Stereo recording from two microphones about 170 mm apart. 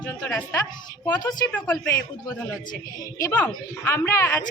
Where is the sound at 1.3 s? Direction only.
20° left (ahead or behind).